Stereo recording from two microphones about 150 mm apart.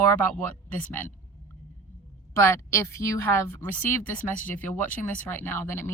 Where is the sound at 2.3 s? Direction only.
20° left (ahead or behind).